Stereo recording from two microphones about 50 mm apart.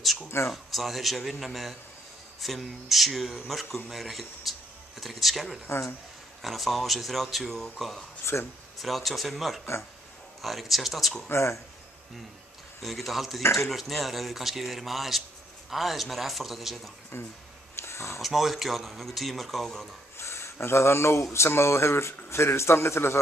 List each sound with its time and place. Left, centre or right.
0.5 s speech: centre
5.7 s speech: left
6.4 s speech: centre
8.3 s speech: left
8.7 s speech: centre
11.2 s speech: left
12.8 s speech: centre
13.4 s speech: left
13.7 s speech: centre
17.7 s a sound: left
18.2 s speech: centre
20.2 s speech: left